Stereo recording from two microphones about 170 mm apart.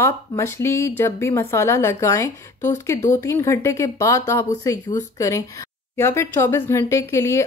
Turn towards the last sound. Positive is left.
turn(degrees=15)  # may be behind; listen again after turning